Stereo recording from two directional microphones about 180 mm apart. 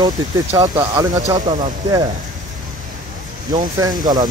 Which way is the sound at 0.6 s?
20° right (ahead or behind).